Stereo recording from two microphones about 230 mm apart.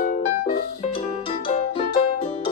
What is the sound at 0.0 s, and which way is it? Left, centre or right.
Music, left.